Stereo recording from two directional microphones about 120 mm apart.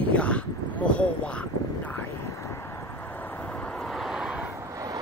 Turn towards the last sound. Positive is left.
turn(degrees=-30)  # may be behind; listen again after turning